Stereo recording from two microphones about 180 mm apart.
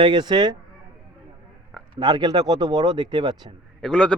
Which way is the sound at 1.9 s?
25° right (ahead or behind).